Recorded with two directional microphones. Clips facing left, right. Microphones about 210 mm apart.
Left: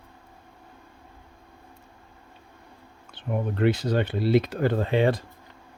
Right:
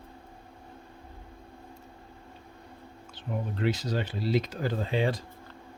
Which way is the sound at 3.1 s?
60° left (ahead or behind).